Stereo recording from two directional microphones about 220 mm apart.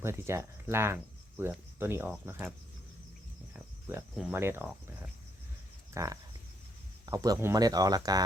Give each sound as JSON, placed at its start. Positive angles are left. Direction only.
{"t": 0.0, "sound": "speech", "side_deg": -10}
{"t": 3.5, "sound": "speech", "side_deg": -5}
{"t": 5.9, "sound": "speech", "side_deg": -15}